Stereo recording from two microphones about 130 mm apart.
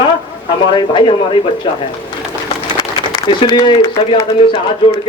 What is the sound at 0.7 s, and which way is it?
Speech, 40° left (ahead or behind).